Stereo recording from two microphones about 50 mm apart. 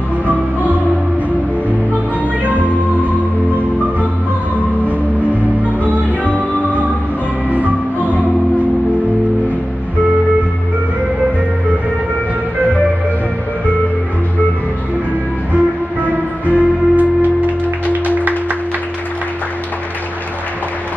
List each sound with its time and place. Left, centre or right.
2.4 s music: right
15.5 s music: right